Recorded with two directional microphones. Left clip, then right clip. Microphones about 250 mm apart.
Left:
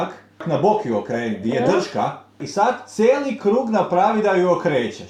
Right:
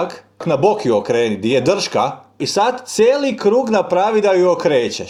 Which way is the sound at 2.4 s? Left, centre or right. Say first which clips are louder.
Right 3 dB; centre.